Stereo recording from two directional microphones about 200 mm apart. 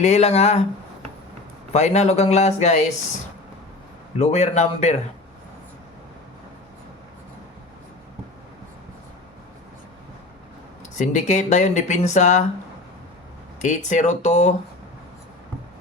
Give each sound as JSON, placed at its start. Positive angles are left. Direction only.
{"t": 0.0, "sound": "speech", "side_deg": 30}
{"t": 1.7, "sound": "speech", "side_deg": 35}
{"t": 4.2, "sound": "speech", "side_deg": 35}
{"t": 10.9, "sound": "speech", "side_deg": 35}
{"t": 13.6, "sound": "speech", "side_deg": 35}